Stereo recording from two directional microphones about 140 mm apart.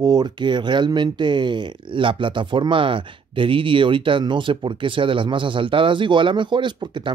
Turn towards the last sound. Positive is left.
turn(degrees=-35)  # may be behind; listen again after turning